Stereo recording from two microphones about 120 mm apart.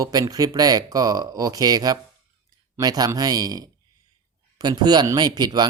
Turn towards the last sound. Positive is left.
turn(degrees=-35)  # may be behind; listen again after turning